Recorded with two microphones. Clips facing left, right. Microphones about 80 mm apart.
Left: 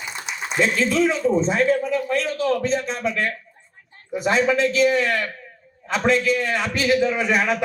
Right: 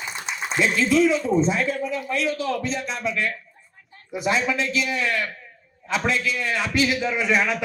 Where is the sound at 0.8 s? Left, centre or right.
Left.